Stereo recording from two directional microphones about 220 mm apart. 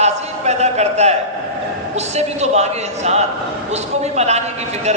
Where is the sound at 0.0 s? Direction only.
30° right (ahead or behind).